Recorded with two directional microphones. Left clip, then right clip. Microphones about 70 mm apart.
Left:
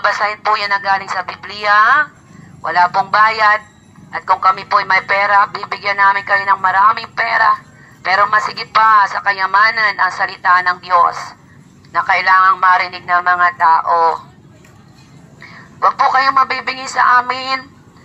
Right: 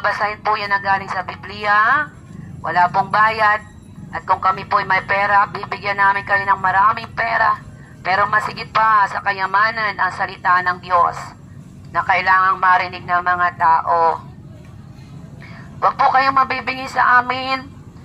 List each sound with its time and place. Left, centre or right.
0.0 s speech: left
11.9 s speech: centre
12.6 s a woman's voice: centre
12.9 s speech: left
13.7 s speech: left
15.4 s a woman's voice: centre